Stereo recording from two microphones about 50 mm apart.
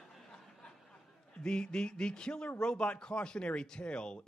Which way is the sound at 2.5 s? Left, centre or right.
Centre.